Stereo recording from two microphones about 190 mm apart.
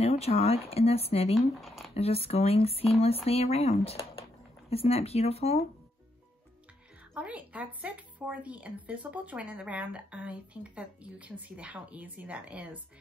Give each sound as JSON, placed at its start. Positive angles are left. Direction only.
{"t": 0.0, "sound": "speech", "side_deg": 30}
{"t": 7.2, "sound": "speech", "side_deg": -5}